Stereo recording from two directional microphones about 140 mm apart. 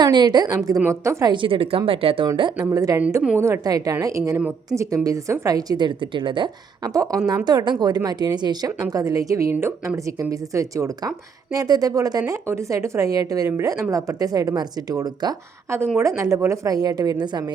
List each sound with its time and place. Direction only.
0.0 s speech: 30° right (ahead or behind)
1.3 s speech: 40° right (ahead or behind)